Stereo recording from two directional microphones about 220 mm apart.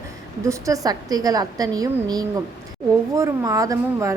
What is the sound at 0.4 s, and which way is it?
A woman's voice, 15° right (ahead or behind).